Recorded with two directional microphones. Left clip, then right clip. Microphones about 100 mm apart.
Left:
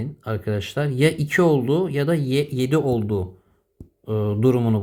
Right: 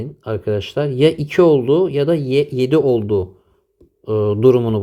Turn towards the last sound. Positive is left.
turn(degrees=-25)  # may be behind; listen again after turning